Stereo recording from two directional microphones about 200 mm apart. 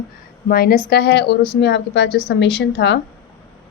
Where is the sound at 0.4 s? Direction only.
50° left (ahead or behind).